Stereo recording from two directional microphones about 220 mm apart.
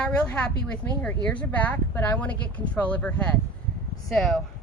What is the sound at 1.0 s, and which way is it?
Speech, 5° left (ahead or behind).